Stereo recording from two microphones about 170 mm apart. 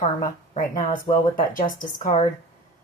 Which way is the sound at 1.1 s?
55° left (ahead or behind).